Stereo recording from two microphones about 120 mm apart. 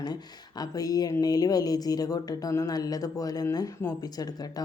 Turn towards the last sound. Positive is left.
turn(degrees=35)  # may be behind; listen again after turning